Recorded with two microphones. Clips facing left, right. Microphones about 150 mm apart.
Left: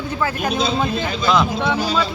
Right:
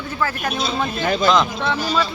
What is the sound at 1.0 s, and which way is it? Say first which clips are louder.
Speech: right 4 dB; 50° right (ahead or behind).